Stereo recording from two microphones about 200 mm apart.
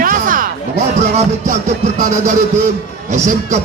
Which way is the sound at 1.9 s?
40° right (ahead or behind).